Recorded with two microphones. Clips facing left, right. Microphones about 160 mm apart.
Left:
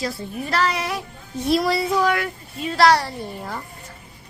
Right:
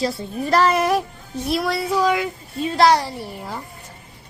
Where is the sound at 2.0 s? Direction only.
15° right (ahead or behind).